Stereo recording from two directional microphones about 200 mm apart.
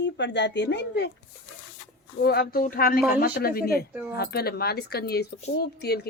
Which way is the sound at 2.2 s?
50° left (ahead or behind).